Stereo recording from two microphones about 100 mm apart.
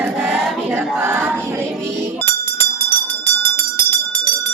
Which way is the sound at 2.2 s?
20° left (ahead or behind).